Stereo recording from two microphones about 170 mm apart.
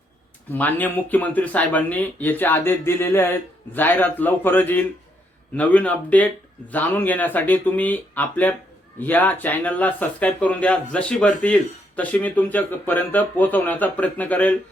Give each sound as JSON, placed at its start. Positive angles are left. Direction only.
{"t": 0.5, "sound": "speech", "side_deg": 10}